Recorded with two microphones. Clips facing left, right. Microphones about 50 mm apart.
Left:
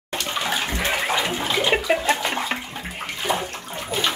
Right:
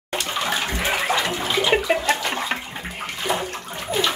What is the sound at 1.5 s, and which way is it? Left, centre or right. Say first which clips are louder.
Toilet flush: right 1 dB; centre.